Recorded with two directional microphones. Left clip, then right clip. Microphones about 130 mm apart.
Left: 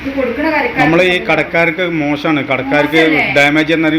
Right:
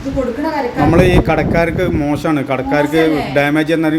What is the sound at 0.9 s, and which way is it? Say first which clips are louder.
A man's voice: left 1 dB; 20° right (ahead or behind).